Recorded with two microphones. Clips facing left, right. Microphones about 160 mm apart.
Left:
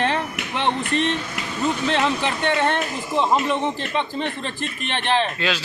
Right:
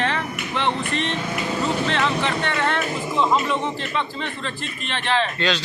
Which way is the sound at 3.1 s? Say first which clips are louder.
Left 1 dB; 20° left (ahead or behind).